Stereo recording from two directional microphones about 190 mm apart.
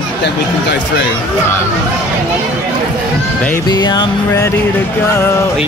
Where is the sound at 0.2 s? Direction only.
65° left (ahead or behind).